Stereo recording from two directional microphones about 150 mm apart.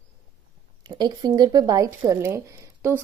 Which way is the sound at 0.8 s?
25° right (ahead or behind).